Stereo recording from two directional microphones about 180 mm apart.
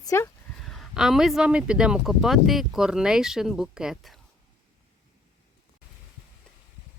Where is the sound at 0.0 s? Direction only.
15° left (ahead or behind).